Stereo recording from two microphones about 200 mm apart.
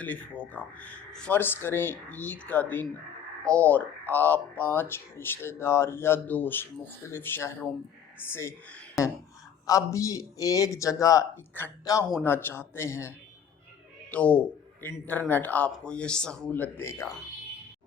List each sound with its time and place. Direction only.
0.0 s speech: 10° left (ahead or behind)